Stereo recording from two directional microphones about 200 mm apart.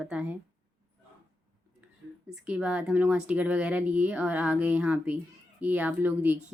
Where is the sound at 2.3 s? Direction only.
5° right (ahead or behind).